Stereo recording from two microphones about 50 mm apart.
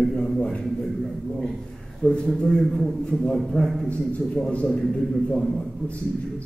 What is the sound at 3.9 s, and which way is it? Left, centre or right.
Speech, left.